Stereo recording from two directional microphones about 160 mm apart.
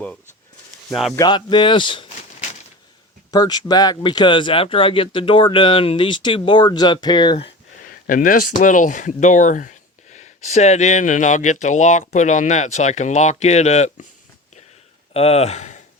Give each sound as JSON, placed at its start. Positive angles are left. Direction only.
{"t": 1.2, "sound": "speech", "side_deg": 30}
{"t": 3.3, "sound": "speech", "side_deg": 25}
{"t": 8.0, "sound": "speech", "side_deg": 60}
{"t": 15.1, "sound": "speech", "side_deg": 40}